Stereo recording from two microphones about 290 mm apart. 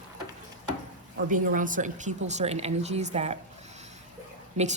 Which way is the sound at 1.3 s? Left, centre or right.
Right.